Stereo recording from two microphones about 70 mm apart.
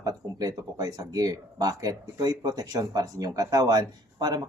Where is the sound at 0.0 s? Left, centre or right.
Right.